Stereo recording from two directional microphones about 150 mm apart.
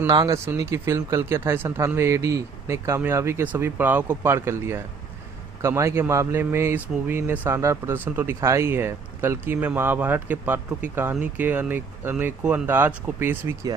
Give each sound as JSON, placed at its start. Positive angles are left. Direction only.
{"t": 0.1, "sound": "speech", "side_deg": -25}